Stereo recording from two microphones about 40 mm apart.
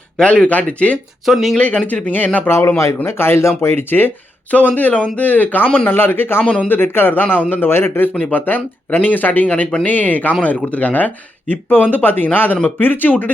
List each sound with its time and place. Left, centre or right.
0.2 s speech: left
0.4 s speech: left
1.2 s speech: centre
1.6 s speech: left
2.0 s speech: left
2.5 s speech: left
3.6 s a man's voice: left
4.5 s speech: left
5.9 s a man's voice: left
6.4 s speech: left
6.7 s a man's voice: left
7.5 s a man's voice: left
8.1 s speech: left